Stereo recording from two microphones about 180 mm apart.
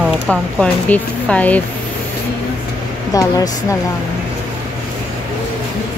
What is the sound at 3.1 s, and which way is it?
Speech, 20° left (ahead or behind).